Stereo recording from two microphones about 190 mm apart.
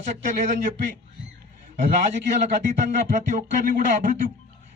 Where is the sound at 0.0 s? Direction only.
40° right (ahead or behind).